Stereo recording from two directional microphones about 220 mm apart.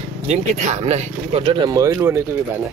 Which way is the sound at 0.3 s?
30° right (ahead or behind).